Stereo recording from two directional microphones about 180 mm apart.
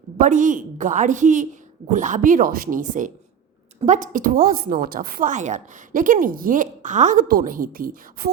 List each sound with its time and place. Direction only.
0.2 s a woman's voice: 45° right (ahead or behind)